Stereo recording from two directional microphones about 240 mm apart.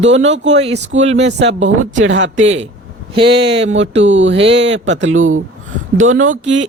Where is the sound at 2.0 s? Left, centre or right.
Right.